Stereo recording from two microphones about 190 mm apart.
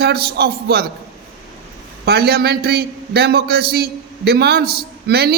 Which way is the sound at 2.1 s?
55° right (ahead or behind).